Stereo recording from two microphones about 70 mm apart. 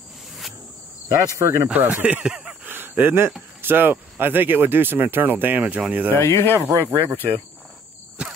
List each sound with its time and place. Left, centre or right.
1.0 s cricket: right
1.8 s speech: right
2.7 s a sound: right
3.6 s speech: right
6.1 s speech: left
6.9 s cricket: right